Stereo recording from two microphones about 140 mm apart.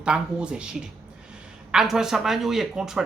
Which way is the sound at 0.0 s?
5° right (ahead or behind).